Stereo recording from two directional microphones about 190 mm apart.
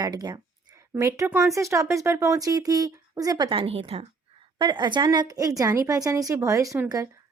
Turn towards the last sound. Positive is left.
turn(degrees=-15)  # may be behind; listen again after turning